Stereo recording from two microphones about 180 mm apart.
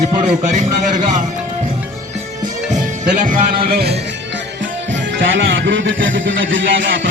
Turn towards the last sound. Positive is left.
turn(degrees=-90)